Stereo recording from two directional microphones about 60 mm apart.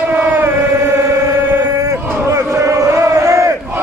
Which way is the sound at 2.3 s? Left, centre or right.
Right.